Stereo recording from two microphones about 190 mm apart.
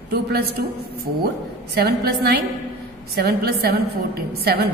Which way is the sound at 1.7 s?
55° right (ahead or behind).